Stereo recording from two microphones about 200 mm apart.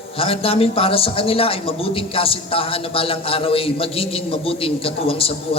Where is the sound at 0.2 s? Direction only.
30° left (ahead or behind).